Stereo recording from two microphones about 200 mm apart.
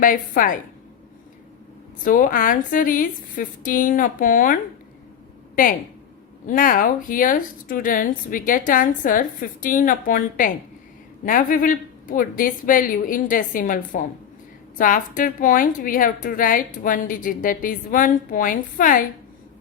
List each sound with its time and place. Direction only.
0.0 s a woman's voice: 45° left (ahead or behind)
2.0 s a woman's voice: 45° left (ahead or behind)
6.4 s a woman's voice: 45° left (ahead or behind)